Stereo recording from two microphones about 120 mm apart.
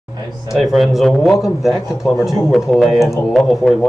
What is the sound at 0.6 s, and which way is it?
Speech, centre (ahead or behind).